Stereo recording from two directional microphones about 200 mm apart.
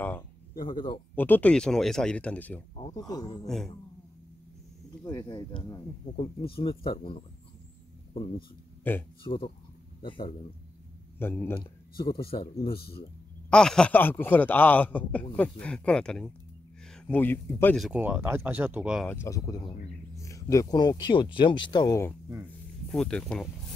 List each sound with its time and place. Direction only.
1.1 s a man's voice: 10° left (ahead or behind)
2.7 s speech: 20° left (ahead or behind)
3.4 s speech: centre (ahead or behind)
5.0 s speech: 20° left (ahead or behind)
8.8 s a man's voice: 10° left (ahead or behind)
9.2 s speech: 25° left (ahead or behind)
11.1 s a man's voice: 10° left (ahead or behind)
13.5 s a man's voice: 5° left (ahead or behind)
19.0 s a man's voice: 15° left (ahead or behind)
22.8 s speech: 5° left (ahead or behind)